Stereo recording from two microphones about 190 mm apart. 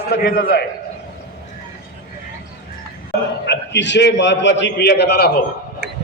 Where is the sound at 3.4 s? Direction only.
65° left (ahead or behind).